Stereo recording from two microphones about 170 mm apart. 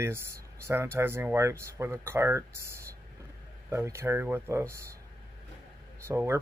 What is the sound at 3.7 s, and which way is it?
Speech, 15° right (ahead or behind).